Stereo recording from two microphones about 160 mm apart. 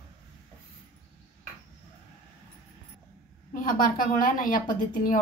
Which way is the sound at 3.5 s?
60° left (ahead or behind).